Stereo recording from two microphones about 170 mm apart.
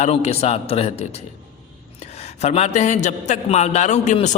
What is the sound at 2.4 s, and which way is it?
A man's voice, 40° left (ahead or behind).